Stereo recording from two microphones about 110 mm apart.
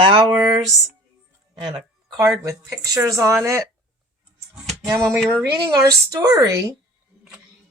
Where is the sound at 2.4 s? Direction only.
30° right (ahead or behind).